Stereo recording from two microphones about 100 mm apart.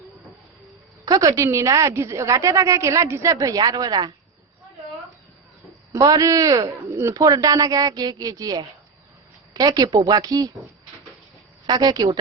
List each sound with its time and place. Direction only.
1.0 s a woman's voice: 35° right (ahead or behind)
5.9 s a woman's voice: 35° right (ahead or behind)
11.6 s a woman's voice: 40° right (ahead or behind)